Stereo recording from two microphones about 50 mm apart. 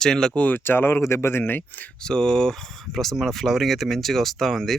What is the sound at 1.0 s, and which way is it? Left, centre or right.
Speech, left.